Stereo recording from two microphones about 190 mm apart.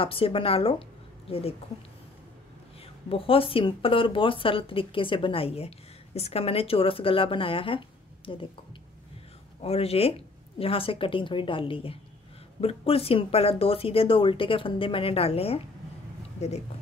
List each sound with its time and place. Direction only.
0.0 s speech: 30° left (ahead or behind)
3.1 s speech: 30° left (ahead or behind)
9.6 s speech: 30° left (ahead or behind)